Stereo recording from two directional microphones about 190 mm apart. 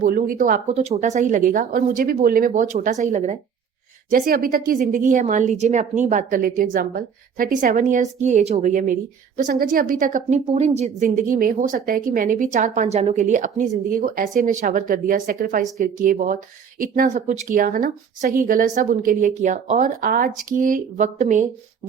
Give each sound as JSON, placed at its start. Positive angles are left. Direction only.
{"t": 0.0, "sound": "a woman's voice", "side_deg": -45}
{"t": 4.1, "sound": "a woman's voice", "side_deg": -50}